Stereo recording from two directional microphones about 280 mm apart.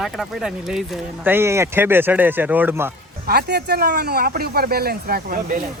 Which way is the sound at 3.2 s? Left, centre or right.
Right.